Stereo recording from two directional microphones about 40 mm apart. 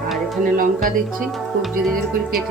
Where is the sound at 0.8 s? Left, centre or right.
Centre.